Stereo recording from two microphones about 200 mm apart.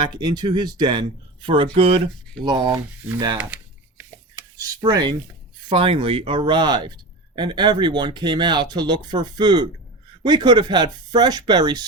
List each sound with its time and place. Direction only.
0.0 s speech: 20° right (ahead or behind)
3.3 s computer keyboard: 10° right (ahead or behind)
4.8 s speech: 20° right (ahead or behind)